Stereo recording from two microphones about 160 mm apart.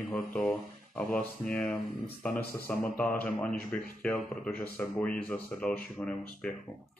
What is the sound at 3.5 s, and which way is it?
Speech, 70° left (ahead or behind).